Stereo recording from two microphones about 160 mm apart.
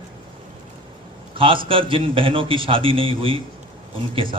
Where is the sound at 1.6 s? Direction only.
35° right (ahead or behind).